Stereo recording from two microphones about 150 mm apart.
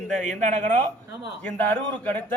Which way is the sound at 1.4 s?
10° left (ahead or behind).